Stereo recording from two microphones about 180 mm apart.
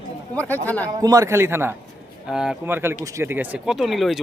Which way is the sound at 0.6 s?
10° left (ahead or behind).